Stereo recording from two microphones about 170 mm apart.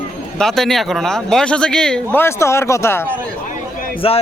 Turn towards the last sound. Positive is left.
turn(degrees=30)  # may be behind; listen again after turning